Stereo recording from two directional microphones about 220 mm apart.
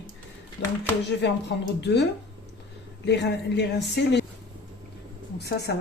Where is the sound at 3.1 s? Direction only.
50° left (ahead or behind).